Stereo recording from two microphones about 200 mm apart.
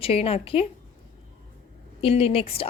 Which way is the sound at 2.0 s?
30° left (ahead or behind).